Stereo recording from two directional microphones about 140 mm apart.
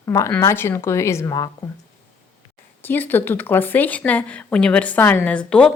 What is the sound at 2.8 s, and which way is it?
A woman's voice, 15° left (ahead or behind).